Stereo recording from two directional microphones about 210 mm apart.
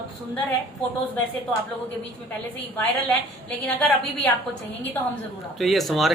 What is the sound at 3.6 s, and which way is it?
Speech, 5° left (ahead or behind).